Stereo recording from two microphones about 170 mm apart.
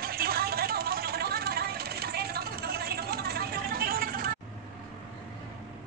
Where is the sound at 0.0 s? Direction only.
60° right (ahead or behind).